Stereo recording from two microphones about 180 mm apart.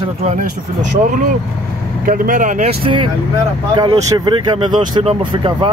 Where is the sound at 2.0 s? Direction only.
50° right (ahead or behind).